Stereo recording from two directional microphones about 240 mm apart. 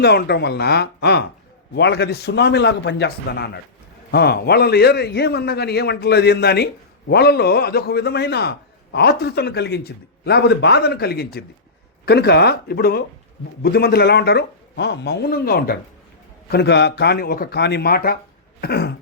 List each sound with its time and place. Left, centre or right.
0.0 s a man's voice: left